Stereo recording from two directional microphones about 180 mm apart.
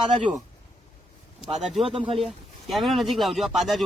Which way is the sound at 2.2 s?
Centre (ahead or behind).